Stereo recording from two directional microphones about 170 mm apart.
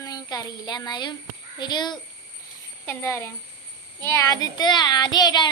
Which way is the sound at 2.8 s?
15° left (ahead or behind).